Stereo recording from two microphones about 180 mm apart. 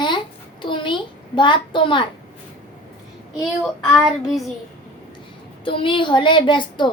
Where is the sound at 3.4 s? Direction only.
Centre (ahead or behind).